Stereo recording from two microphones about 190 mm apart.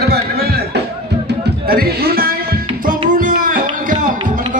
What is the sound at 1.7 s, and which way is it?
Speech, 55° right (ahead or behind).